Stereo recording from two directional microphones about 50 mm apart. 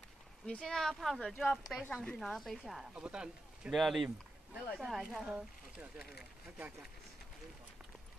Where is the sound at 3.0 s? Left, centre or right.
Centre.